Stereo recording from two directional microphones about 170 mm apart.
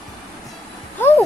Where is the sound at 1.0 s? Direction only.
10° left (ahead or behind).